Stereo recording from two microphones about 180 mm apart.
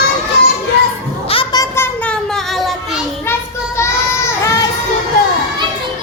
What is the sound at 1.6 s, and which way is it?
Children playing, 10° left (ahead or behind).